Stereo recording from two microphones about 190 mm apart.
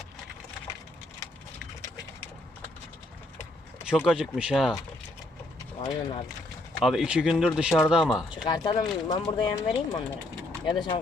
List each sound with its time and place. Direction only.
3.8 s speech: 5° right (ahead or behind)
5.8 s speech: 25° left (ahead or behind)
6.8 s speech: centre (ahead or behind)
8.4 s speech: 20° left (ahead or behind)